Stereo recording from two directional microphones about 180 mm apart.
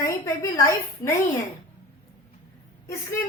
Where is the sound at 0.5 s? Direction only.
15° left (ahead or behind).